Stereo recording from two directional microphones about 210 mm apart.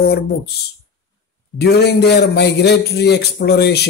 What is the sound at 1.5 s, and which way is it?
Speech, 50° left (ahead or behind).